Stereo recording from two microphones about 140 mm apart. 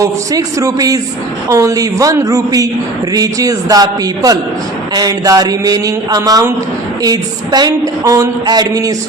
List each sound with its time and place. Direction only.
0.0 s a woman's voice: 25° right (ahead or behind)